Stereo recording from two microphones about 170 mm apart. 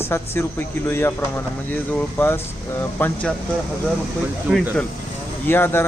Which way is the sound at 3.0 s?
10° left (ahead or behind).